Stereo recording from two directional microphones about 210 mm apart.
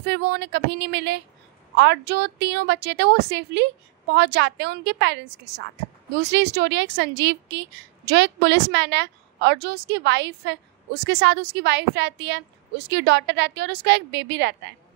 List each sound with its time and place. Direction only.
0.0 s a woman's voice: 55° right (ahead or behind)